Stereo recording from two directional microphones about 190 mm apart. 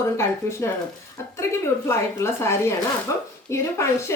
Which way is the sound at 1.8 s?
15° left (ahead or behind).